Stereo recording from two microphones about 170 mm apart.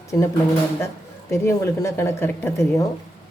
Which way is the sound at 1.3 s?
15° left (ahead or behind).